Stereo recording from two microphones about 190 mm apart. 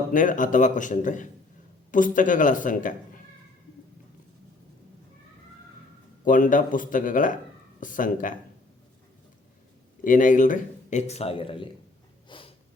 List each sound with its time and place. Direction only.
0.1 s a man's voice: 45° left (ahead or behind)
6.2 s a man's voice: 45° left (ahead or behind)
10.0 s speech: 45° left (ahead or behind); by 11.7 s 25° left (ahead or behind)
12.3 s snort: 30° left (ahead or behind)